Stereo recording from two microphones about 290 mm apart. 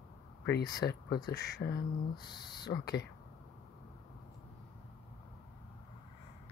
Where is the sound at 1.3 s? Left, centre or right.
Left.